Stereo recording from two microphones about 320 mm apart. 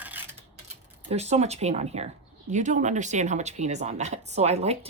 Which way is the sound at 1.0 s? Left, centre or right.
Centre.